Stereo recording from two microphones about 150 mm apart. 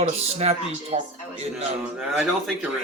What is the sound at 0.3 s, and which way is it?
Speech, 45° right (ahead or behind).